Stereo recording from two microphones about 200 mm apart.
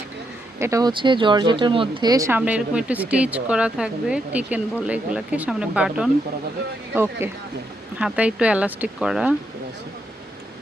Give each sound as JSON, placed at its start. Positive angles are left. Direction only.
{"t": 0.6, "sound": "speech", "side_deg": -15}